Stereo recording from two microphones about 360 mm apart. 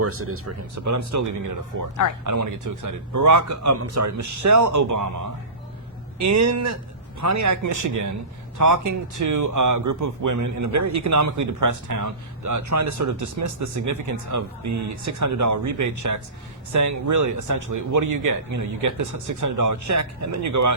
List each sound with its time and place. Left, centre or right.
0.0 s speech: right